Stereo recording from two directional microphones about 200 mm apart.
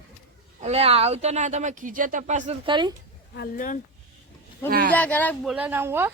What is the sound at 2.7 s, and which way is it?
Speech, 20° right (ahead or behind).